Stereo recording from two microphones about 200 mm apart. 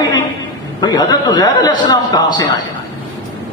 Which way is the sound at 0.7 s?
20° left (ahead or behind).